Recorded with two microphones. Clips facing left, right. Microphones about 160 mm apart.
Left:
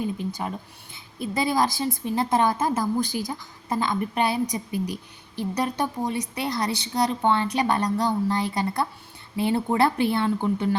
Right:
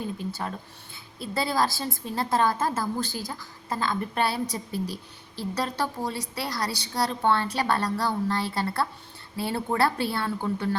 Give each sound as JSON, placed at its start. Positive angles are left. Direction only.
{"t": 0.3, "sound": "a woman's voice", "side_deg": 15}